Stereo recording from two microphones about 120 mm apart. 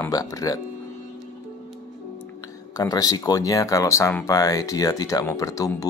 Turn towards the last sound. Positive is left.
turn(degrees=30)  # may be behind; listen again after turning